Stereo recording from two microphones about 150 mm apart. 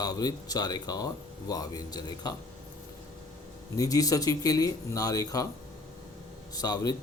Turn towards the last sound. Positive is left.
turn(degrees=25)  # may be behind; listen again after turning